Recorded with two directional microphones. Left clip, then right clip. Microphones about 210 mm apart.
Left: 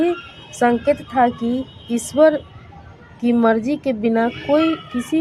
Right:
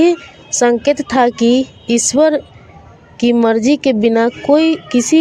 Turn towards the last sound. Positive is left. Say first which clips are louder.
# right 7 dB
turn(degrees=-40)  # may be behind; listen again after turning